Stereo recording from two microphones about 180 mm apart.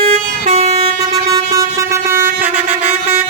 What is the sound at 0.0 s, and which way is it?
Vehicle, 35° right (ahead or behind).